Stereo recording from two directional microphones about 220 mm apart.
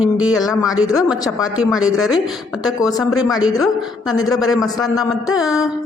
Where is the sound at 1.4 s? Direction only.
5° right (ahead or behind).